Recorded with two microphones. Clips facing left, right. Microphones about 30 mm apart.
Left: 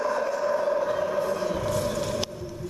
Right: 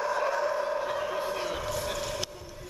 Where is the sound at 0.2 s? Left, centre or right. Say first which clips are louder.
Left 1 dB; centre.